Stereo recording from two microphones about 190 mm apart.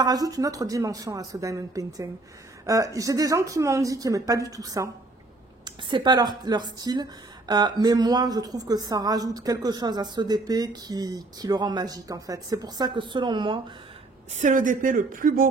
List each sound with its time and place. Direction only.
0.0 s a woman's voice: 20° right (ahead or behind)
14.3 s speech: 40° right (ahead or behind)